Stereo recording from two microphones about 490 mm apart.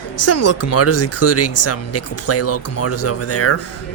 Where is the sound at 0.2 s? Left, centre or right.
Left.